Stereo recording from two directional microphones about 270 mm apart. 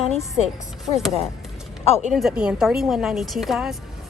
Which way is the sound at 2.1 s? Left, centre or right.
Centre.